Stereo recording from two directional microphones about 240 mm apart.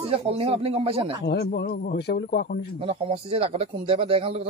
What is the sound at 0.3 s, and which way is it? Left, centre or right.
Speech, right.